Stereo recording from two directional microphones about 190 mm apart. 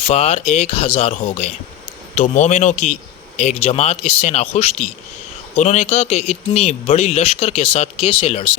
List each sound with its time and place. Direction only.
0.0 s speech: 35° left (ahead or behind)